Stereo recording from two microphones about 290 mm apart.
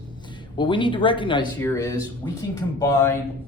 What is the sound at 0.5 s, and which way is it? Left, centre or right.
Speech, centre.